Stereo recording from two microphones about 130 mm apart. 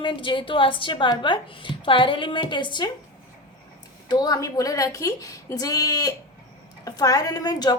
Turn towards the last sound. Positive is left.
turn(degrees=30)  # may be behind; listen again after turning